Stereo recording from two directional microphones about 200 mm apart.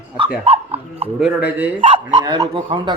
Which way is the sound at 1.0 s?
10° right (ahead or behind).